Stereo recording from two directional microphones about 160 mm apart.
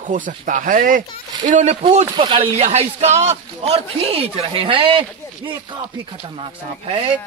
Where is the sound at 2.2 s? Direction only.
35° right (ahead or behind).